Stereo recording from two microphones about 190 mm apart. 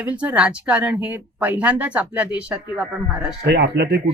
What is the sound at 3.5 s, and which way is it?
Speech, 60° right (ahead or behind).